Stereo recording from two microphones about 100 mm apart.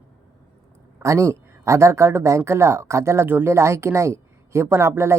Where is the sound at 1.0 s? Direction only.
30° right (ahead or behind).